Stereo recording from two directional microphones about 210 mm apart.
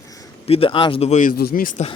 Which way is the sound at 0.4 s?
25° left (ahead or behind).